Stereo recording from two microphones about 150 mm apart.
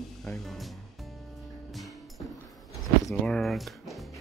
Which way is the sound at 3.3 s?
Centre (ahead or behind).